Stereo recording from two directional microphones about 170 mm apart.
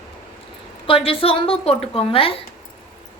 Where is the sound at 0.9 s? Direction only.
35° left (ahead or behind).